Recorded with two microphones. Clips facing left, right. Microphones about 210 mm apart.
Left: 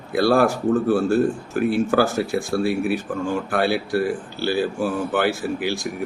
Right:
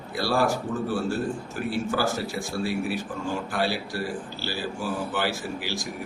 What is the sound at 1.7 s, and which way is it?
Speech, 55° left (ahead or behind).